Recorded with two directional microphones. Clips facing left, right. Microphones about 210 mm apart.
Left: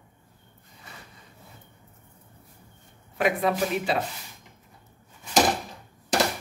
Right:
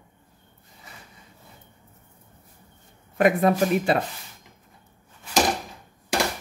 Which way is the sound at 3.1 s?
50° right (ahead or behind).